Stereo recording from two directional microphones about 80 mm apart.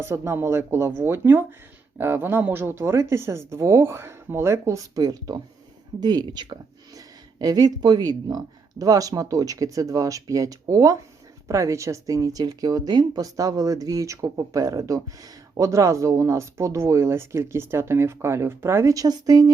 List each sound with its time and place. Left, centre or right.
0.0 s speech: right
6.0 s speech: right
6.9 s speech: right
18.9 s speech: right